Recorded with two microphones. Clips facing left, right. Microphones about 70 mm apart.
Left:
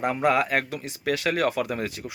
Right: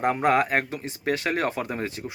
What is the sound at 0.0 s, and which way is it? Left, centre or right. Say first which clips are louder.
Speech: right 1 dB; right.